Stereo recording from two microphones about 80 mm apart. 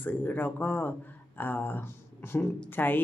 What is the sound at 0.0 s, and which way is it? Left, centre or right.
Speech, left.